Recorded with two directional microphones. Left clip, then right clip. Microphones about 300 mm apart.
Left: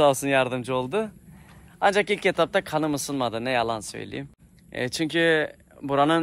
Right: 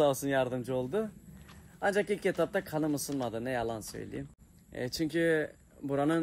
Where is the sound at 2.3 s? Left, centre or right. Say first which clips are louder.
Left 8 dB; centre.